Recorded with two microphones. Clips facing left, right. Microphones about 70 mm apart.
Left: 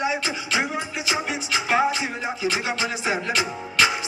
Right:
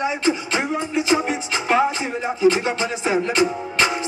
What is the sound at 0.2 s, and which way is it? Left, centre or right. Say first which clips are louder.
Speech: right 6 dB; right.